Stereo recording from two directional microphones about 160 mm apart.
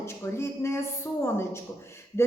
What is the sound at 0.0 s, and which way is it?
A woman's voice, 15° left (ahead or behind).